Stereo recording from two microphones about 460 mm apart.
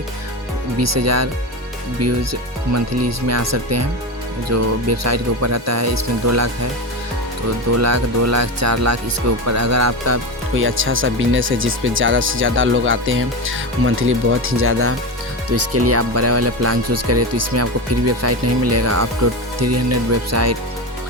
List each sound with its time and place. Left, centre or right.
0.8 s speech: right
7.8 s speech: right